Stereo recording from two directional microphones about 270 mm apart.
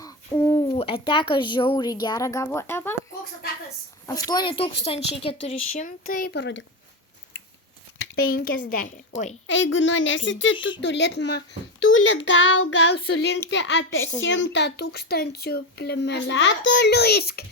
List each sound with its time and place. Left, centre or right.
0.0 s hoot: centre
0.7 s speech: centre
4.0 s speech: centre; by 6.7 s left
8.1 s speech: left
9.5 s a woman's voice: left